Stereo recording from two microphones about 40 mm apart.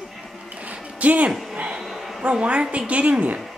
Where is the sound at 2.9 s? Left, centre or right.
Right.